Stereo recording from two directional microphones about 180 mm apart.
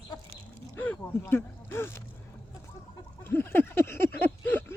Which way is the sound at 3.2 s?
10° left (ahead or behind).